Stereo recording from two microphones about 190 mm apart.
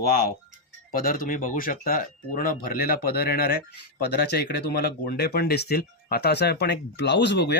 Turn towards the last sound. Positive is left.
turn(degrees=65)  # may be behind; listen again after turning